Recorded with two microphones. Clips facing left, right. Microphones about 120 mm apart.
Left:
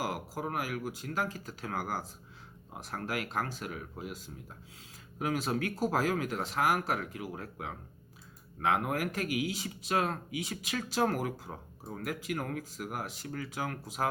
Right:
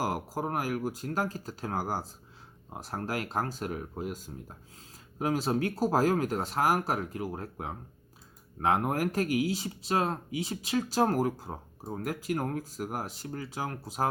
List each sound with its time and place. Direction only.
0.0 s speech: 40° right (ahead or behind)